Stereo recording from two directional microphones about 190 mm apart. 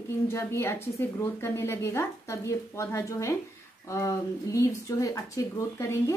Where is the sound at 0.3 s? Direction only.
15° left (ahead or behind).